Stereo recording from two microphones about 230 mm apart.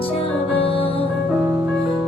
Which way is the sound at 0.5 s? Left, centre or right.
Left.